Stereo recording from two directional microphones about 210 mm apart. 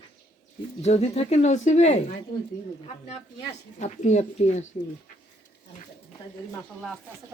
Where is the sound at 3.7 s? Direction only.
35° left (ahead or behind).